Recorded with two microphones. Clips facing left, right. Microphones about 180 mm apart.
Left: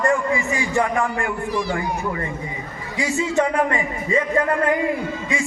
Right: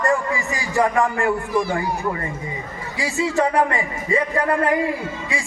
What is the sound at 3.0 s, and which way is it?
A man's voice, 35° right (ahead or behind).